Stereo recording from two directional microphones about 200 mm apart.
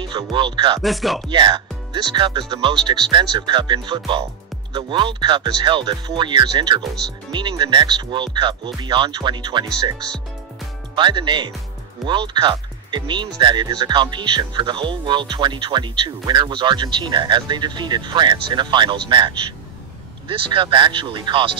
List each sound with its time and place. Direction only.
0.0 s speech: 25° right (ahead or behind)
0.8 s music: centre (ahead or behind)
1.3 s speech: 25° right (ahead or behind)
11.0 s speech: 20° right (ahead or behind)